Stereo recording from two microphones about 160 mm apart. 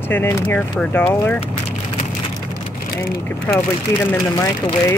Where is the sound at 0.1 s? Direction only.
15° left (ahead or behind).